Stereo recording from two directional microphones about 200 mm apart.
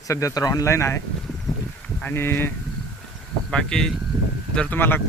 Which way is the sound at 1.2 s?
5° left (ahead or behind).